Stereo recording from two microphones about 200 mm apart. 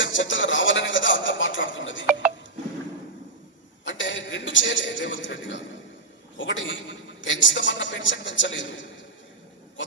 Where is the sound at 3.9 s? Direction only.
70° left (ahead or behind).